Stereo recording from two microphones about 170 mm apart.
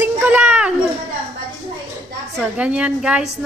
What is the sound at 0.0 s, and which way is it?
Children playing, 10° right (ahead or behind).